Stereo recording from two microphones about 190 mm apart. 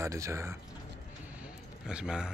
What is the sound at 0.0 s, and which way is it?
Speech, 15° right (ahead or behind).